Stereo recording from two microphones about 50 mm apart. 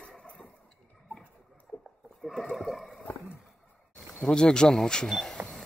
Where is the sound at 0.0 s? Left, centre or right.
Left.